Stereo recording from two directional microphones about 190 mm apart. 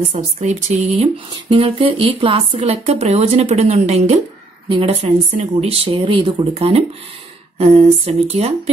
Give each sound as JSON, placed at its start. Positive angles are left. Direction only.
{"t": 0.1, "sound": "speech", "side_deg": -40}
{"t": 1.3, "sound": "speech", "side_deg": -25}
{"t": 5.0, "sound": "speech", "side_deg": -35}